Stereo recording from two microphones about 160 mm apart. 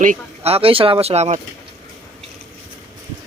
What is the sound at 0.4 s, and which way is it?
Speech, 35° right (ahead or behind).